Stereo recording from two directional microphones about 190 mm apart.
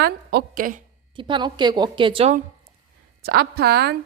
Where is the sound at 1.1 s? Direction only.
25° right (ahead or behind).